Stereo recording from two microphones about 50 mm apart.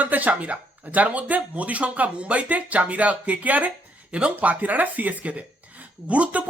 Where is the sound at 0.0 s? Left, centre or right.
Right.